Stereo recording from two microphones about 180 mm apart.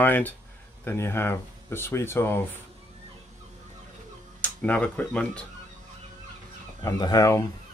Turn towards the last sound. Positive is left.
turn(degrees=20)  # may be behind; listen again after turning